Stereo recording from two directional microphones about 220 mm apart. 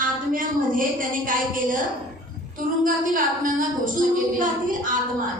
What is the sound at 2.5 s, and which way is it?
Speech, 40° right (ahead or behind).